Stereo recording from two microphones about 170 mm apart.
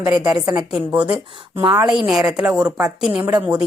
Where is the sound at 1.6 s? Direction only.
25° right (ahead or behind).